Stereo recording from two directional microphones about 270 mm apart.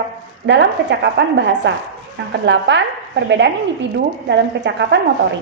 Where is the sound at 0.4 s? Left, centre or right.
Right.